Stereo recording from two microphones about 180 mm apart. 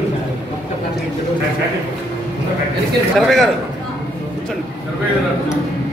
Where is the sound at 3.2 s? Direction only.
Centre (ahead or behind).